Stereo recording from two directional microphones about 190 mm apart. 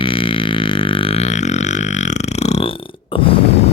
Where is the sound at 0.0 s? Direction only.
30° left (ahead or behind).